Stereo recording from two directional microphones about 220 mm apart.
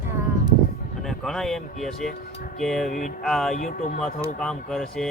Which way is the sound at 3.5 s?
35° left (ahead or behind).